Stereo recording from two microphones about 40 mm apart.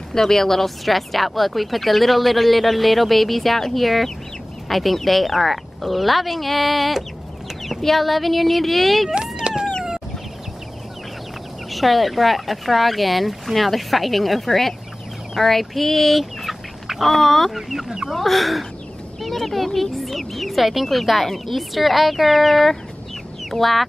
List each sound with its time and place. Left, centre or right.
0.1 s speech: centre
9.1 s a sound: right
11.7 s speech: centre
15.3 s chicken: centre
17.6 s speech: centre